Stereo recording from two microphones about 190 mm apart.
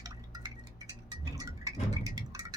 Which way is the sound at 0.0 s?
20° right (ahead or behind).